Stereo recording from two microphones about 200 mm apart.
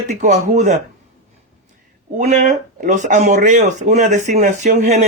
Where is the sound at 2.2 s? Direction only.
40° right (ahead or behind).